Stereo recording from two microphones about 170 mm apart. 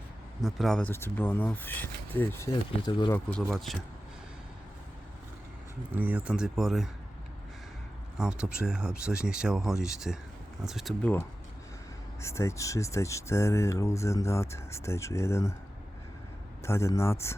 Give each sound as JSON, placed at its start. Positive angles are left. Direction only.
{"t": 0.4, "sound": "speech", "side_deg": 0}
{"t": 2.8, "sound": "speech", "side_deg": 25}
{"t": 3.2, "sound": "speech", "side_deg": 5}
{"t": 5.9, "sound": "speech", "side_deg": -10}
{"t": 8.2, "sound": "speech", "side_deg": -5}
{"t": 12.2, "sound": "speech", "side_deg": 15}
{"t": 16.6, "sound": "speech", "side_deg": 15}